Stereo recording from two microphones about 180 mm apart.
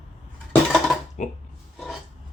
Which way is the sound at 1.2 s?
40° left (ahead or behind).